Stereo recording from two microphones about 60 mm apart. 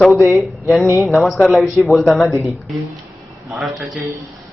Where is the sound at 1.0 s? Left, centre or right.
Centre.